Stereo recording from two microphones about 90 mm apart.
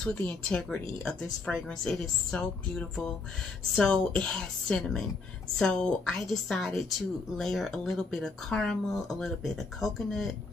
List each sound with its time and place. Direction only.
0.0 s a woman's voice: 15° left (ahead or behind)